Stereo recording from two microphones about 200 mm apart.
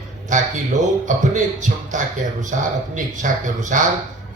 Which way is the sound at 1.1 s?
40° right (ahead or behind).